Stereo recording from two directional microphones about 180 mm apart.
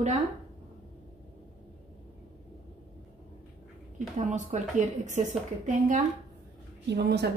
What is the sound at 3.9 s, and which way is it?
A woman's voice, 45° right (ahead or behind).